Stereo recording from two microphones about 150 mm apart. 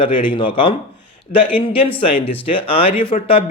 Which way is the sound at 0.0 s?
35° left (ahead or behind).